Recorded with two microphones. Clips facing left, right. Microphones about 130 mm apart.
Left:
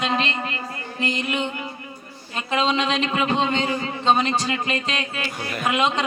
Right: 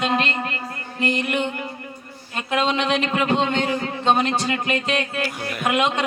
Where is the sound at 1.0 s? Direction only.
60° right (ahead or behind).